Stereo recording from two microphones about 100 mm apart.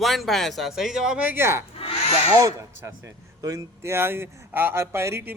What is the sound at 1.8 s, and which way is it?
Crow, 85° left.